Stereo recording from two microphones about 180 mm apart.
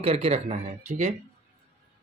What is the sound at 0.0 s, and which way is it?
Speech, 35° right (ahead or behind).